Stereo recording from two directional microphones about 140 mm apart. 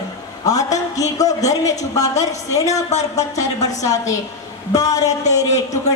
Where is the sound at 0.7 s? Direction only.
55° left (ahead or behind).